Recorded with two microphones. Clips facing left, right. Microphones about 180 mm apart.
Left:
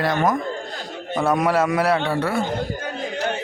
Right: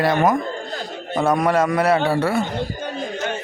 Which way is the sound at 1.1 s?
20° right (ahead or behind).